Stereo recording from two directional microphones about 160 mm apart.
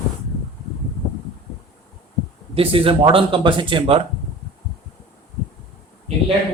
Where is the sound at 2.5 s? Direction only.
35° right (ahead or behind).